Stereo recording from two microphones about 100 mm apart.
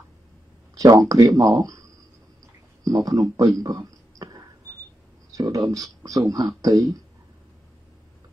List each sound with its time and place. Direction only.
0.7 s speech: 35° right (ahead or behind)